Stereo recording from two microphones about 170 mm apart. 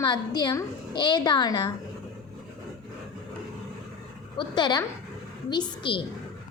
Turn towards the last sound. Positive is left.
turn(degrees=25)  # may be behind; listen again after turning